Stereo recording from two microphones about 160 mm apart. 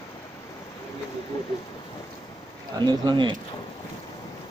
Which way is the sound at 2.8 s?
30° right (ahead or behind).